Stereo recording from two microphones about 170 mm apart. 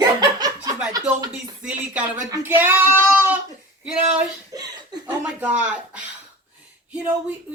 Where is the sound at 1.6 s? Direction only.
10° right (ahead or behind).